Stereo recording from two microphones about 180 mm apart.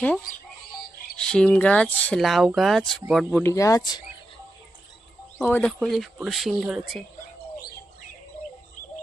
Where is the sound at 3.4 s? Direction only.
15° left (ahead or behind).